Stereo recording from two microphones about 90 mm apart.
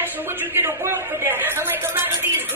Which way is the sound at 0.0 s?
25° right (ahead or behind).